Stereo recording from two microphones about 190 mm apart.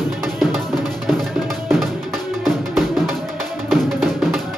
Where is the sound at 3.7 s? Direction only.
Centre (ahead or behind).